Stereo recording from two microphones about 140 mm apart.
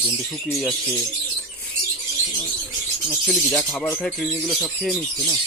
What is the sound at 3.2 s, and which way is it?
Speech, 5° left (ahead or behind).